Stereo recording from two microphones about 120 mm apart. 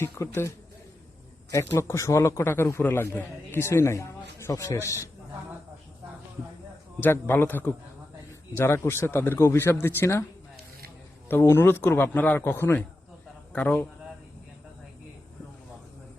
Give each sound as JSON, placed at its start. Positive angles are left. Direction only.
{"t": 0.0, "sound": "a man's voice", "side_deg": 25}
{"t": 7.0, "sound": "a man's voice", "side_deg": 20}
{"t": 11.3, "sound": "a man's voice", "side_deg": 20}